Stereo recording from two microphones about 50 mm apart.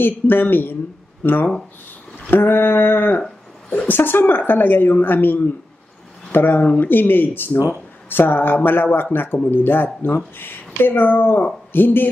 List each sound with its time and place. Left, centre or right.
0.0 s speech: left